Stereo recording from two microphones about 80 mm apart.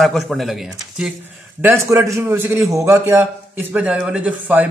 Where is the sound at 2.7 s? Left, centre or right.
Right.